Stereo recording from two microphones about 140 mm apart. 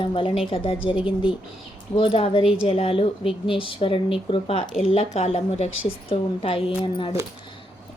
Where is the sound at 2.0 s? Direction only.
40° left (ahead or behind).